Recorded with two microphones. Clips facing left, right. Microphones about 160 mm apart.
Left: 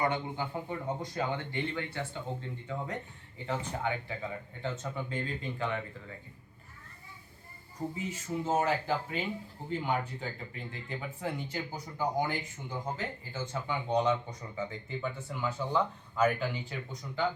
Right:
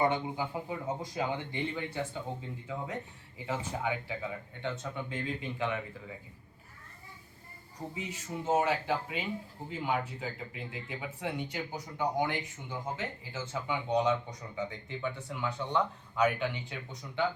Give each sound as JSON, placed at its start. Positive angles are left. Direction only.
{"t": 0.3, "sound": "speech", "side_deg": -5}
{"t": 7.9, "sound": "speech", "side_deg": 0}